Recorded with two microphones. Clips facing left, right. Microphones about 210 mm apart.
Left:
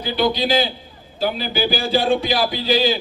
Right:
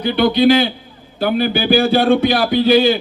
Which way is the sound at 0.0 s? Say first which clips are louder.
Right 7 dB; 60° right (ahead or behind).